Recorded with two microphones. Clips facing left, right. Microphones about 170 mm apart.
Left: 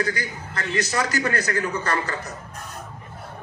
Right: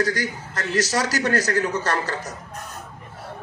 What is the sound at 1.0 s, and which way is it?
Speech, 85° right.